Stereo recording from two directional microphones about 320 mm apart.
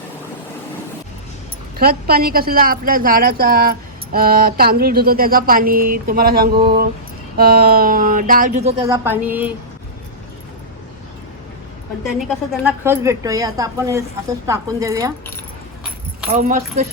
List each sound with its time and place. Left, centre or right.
1.8 s a woman's voice: right
8.8 s a woman's voice: centre
12.5 s a woman's voice: centre
16.3 s a woman's voice: right